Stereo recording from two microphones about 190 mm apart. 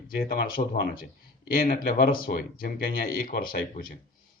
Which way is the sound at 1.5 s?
50° left (ahead or behind).